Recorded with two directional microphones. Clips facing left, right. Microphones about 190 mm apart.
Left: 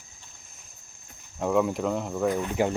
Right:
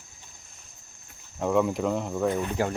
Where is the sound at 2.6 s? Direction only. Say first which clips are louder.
Left 4 dB; 20° left (ahead or behind).